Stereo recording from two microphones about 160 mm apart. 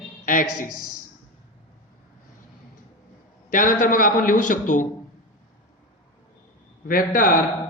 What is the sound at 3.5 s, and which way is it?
A man's voice, 55° left (ahead or behind).